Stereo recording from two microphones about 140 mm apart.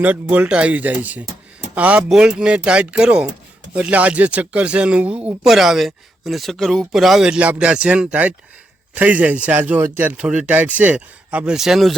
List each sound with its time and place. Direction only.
0.0 s speech: 10° right (ahead or behind)